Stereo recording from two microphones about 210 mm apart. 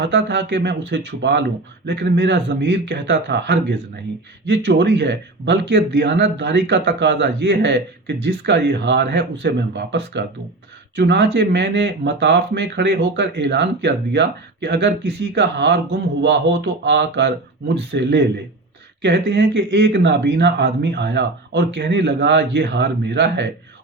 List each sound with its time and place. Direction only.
0.0 s speech: 55° right (ahead or behind)